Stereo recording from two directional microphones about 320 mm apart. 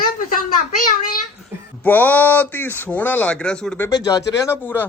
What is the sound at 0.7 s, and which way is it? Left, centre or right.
Speech, left.